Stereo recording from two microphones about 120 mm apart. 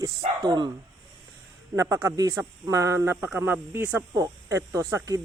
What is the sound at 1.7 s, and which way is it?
Speech, 25° right (ahead or behind).